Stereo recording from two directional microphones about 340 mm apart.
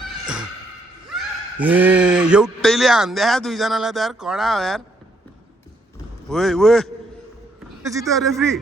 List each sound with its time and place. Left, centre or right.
1.5 s speech: centre
6.2 s speech: centre